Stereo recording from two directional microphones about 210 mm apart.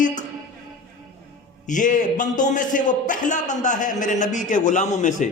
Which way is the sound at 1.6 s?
35° left (ahead or behind).